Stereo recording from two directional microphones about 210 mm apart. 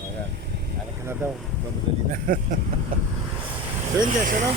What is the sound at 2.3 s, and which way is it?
Speech, 40° right (ahead or behind).